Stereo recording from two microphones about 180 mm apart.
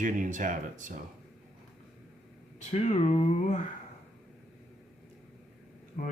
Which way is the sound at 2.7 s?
35° left (ahead or behind).